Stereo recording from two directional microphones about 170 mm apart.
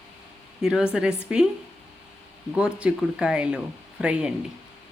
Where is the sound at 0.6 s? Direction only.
5° right (ahead or behind).